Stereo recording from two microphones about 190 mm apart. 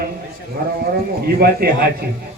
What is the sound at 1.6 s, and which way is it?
Speech, 55° right (ahead or behind).